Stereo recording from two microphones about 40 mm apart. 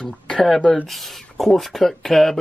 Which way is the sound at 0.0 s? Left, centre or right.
Left.